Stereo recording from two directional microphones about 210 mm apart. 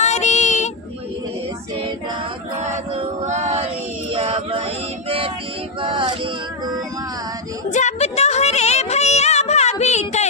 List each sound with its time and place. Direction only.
0.0 s child singing: 35° left (ahead or behind)
2.6 s choir: 30° right (ahead or behind)
4.1 s male singing: 30° right (ahead or behind)
7.7 s a sound: 35° left (ahead or behind)